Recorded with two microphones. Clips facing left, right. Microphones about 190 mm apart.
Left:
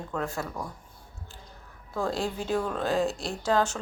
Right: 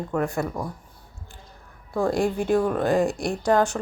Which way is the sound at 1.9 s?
10° right (ahead or behind).